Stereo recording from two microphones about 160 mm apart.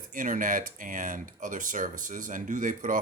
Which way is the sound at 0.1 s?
60° right (ahead or behind).